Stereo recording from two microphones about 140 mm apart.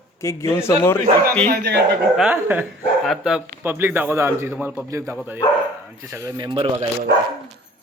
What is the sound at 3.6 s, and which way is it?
A man's voice, 15° right (ahead or behind).